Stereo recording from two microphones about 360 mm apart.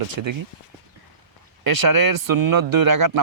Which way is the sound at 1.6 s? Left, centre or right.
Right.